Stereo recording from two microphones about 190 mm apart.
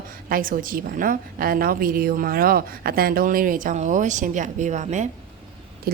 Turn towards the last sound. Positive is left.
turn(degrees=-40)  # may be behind; listen again after turning